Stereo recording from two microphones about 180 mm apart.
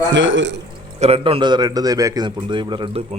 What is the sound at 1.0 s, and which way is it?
A man's voice, 30° right (ahead or behind).